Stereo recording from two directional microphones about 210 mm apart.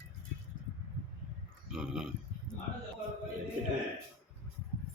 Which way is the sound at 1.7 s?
5° right (ahead or behind).